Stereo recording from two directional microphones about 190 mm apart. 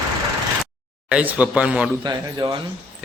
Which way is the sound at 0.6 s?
5° right (ahead or behind).